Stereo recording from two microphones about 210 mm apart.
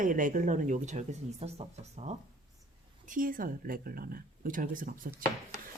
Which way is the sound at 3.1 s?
40° right (ahead or behind).